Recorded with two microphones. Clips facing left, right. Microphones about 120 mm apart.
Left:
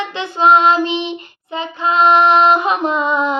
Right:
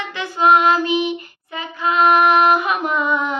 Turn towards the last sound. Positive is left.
turn(degrees=20)  # may be behind; listen again after turning